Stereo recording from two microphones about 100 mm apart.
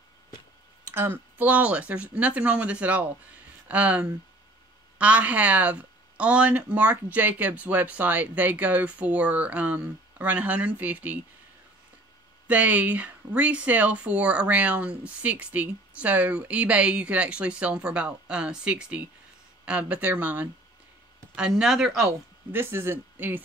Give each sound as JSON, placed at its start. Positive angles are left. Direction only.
{"t": 0.8, "sound": "speech", "side_deg": -20}
{"t": 12.4, "sound": "speech", "side_deg": -15}
{"t": 22.0, "sound": "speech", "side_deg": -25}